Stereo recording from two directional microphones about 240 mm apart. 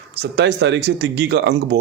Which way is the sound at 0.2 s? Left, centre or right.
Right.